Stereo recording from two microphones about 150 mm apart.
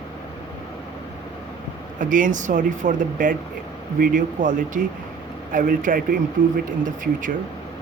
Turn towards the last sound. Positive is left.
turn(degrees=-60)  # may be behind; listen again after turning